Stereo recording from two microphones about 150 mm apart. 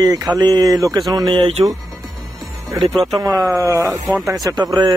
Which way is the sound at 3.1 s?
25° right (ahead or behind).